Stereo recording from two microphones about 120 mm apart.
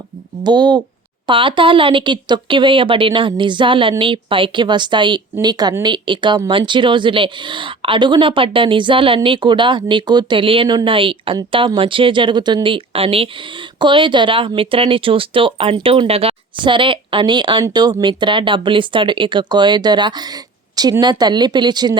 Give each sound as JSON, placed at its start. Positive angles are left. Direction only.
{"t": 0.4, "sound": "speech", "side_deg": -35}
{"t": 13.7, "sound": "speech", "side_deg": -40}